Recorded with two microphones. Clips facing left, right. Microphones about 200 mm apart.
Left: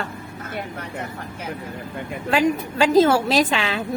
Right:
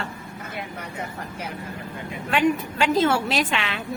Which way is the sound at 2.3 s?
35° left (ahead or behind).